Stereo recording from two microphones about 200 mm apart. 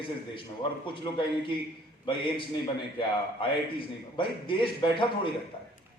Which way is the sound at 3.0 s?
25° left (ahead or behind).